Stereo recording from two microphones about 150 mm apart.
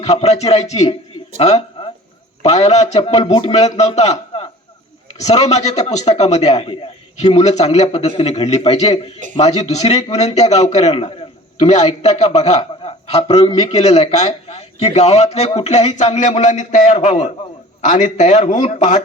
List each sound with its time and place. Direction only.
0.0 s a man's voice: 45° left (ahead or behind)